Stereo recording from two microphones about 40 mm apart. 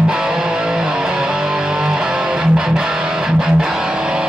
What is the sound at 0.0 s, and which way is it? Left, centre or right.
Music, centre.